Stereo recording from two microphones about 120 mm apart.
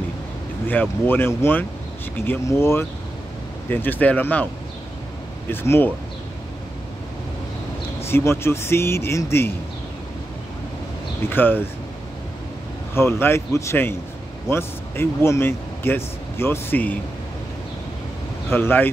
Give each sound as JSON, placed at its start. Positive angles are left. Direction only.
{"t": 0.7, "sound": "speech", "side_deg": 15}
{"t": 5.5, "sound": "speech", "side_deg": 20}
{"t": 8.0, "sound": "speech", "side_deg": 20}
{"t": 11.2, "sound": "speech", "side_deg": 15}
{"t": 12.9, "sound": "speech", "side_deg": 20}
{"t": 18.5, "sound": "speech", "side_deg": 20}